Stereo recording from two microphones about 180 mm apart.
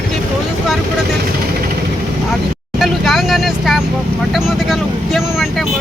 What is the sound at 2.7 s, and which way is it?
Vehicle, centre (ahead or behind).